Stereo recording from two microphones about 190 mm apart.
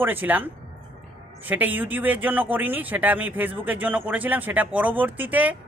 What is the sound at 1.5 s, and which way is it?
Speech, 10° right (ahead or behind).